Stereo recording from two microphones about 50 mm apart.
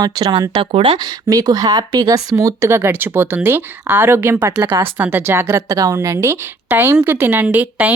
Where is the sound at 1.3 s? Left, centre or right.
Right.